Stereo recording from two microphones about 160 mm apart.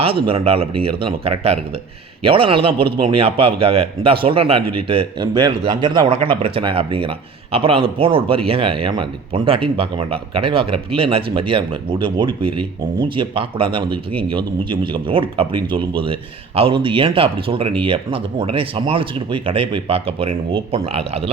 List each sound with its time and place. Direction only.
0.0 s a man's voice: 35° right (ahead or behind)